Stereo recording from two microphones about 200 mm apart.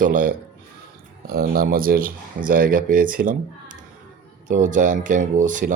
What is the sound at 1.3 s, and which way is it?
Speech, 45° right (ahead or behind).